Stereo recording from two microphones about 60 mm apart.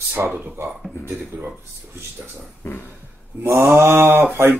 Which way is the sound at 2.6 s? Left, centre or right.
Left.